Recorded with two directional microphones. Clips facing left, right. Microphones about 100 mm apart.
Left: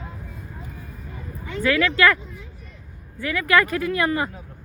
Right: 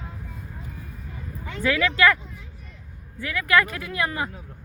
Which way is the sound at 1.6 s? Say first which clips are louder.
Left 2 dB; 20° right (ahead or behind).